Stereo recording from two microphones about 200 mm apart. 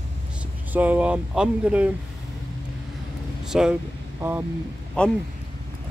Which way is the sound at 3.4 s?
5° right (ahead or behind).